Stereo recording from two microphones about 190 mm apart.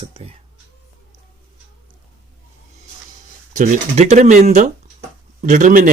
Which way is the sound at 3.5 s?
40° right (ahead or behind).